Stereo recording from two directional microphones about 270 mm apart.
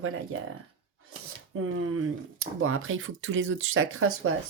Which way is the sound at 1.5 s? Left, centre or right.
Right.